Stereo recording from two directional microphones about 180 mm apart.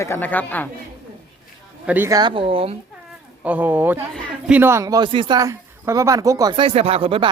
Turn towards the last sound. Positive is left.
turn(degrees=-30)  # may be behind; listen again after turning